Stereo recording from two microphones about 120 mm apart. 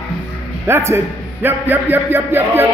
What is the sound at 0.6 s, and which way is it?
A man's voice, 20° right (ahead or behind).